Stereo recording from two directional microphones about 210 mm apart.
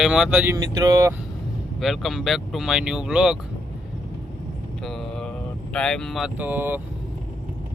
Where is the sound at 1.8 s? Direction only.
Centre (ahead or behind).